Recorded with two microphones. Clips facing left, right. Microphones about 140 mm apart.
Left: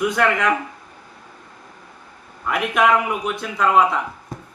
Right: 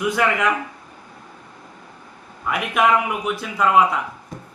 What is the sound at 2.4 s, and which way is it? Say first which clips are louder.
A man's voice: left 1 dB; centre (ahead or behind).